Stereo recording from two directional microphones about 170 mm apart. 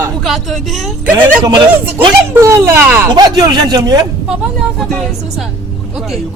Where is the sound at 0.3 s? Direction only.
Centre (ahead or behind).